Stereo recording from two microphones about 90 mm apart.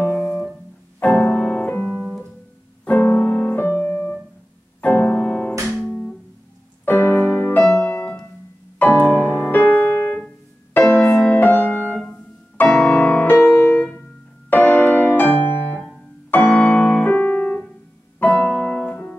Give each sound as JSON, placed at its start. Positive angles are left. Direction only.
{"t": 0.1, "sound": "music", "side_deg": 15}
{"t": 0.9, "sound": "piano", "side_deg": 20}
{"t": 2.8, "sound": "keyboard", "side_deg": 20}
{"t": 4.8, "sound": "music", "side_deg": 20}
{"t": 7.7, "sound": "piano", "side_deg": 25}
{"t": 8.9, "sound": "music", "side_deg": 20}
{"t": 9.2, "sound": "music", "side_deg": -20}
{"t": 9.5, "sound": "music", "side_deg": 20}
{"t": 12.1, "sound": "piano", "side_deg": 20}
{"t": 12.7, "sound": "music", "side_deg": 10}
{"t": 16.3, "sound": "piano", "side_deg": 20}